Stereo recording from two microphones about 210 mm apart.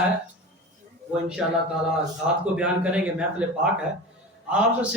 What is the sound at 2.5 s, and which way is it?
A man's voice, 5° right (ahead or behind).